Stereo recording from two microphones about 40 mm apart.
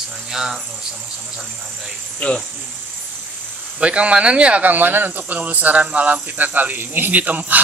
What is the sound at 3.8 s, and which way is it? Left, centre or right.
Speech, right.